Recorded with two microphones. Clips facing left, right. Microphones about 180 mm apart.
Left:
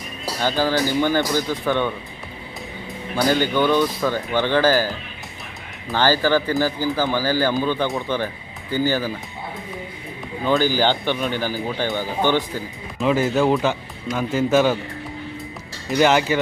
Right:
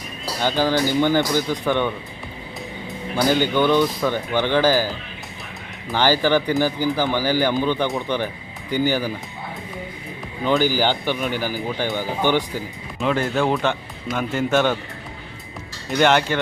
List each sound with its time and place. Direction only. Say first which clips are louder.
0.3 s speech: right 1 dB; 15° right (ahead or behind)
3.2 s speech: even; 15° right (ahead or behind)
5.9 s speech: even; 15° right (ahead or behind)
10.6 s speech: left 1 dB; 15° right (ahead or behind)
13.0 s speech: left 2 dB; centre (ahead or behind)
15.9 s speech: left 1 dB; 5° left (ahead or behind)